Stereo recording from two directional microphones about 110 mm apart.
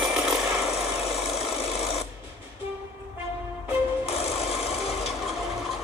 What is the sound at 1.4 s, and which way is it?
Engine, 70° left (ahead or behind).